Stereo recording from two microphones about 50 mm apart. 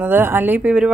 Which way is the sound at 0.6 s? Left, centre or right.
Centre.